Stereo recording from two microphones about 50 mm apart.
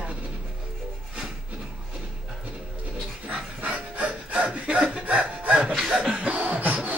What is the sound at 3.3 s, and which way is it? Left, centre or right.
Dog, right.